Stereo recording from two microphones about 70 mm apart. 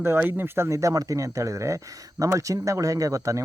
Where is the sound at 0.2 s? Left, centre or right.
Right.